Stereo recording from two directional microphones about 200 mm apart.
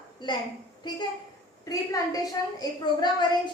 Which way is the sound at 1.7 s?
15° left (ahead or behind).